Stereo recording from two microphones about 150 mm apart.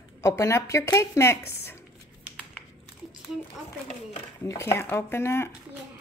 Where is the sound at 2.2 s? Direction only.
5° right (ahead or behind).